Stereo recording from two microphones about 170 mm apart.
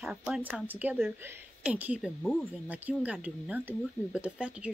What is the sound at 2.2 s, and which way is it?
Speech, 5° left (ahead or behind).